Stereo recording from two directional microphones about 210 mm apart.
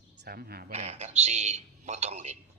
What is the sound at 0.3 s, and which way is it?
Speech, 45° right (ahead or behind).